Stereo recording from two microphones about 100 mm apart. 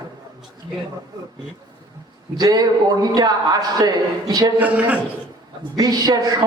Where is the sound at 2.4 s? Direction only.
40° right (ahead or behind).